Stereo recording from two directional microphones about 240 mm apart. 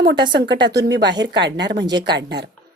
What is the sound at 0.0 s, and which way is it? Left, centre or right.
A woman's voice, right.